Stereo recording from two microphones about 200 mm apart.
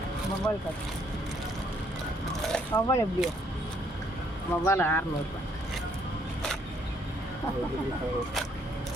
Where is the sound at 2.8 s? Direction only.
15° left (ahead or behind).